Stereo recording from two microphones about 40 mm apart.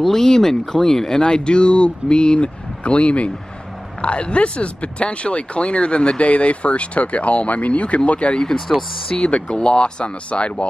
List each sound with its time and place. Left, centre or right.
0.0 s speech: centre; by 8.4 s left
8.4 s speech: centre; by 10.7 s left